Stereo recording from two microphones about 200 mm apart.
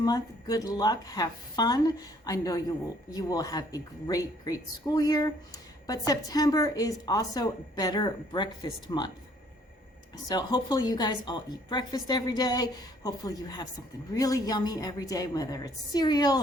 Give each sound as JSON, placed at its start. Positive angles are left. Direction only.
{"t": 0.0, "sound": "a woman's voice", "side_deg": 20}
{"t": 10.2, "sound": "a woman's voice", "side_deg": 20}